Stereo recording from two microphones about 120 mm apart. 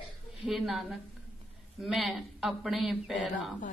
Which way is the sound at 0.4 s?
5° right (ahead or behind).